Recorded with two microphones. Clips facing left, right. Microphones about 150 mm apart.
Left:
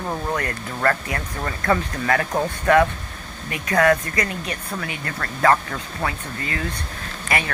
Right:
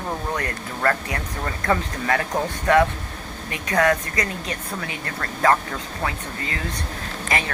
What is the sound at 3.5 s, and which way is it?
Speech, 20° right (ahead or behind).